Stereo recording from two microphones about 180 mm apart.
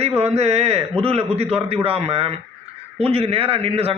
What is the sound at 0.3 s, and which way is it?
Speech, 35° right (ahead or behind).